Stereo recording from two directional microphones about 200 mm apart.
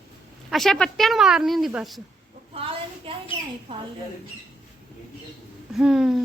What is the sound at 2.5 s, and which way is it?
A woman's voice, 25° right (ahead or behind).